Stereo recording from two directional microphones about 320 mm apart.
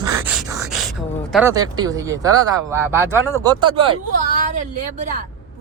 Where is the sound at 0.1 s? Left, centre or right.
Centre.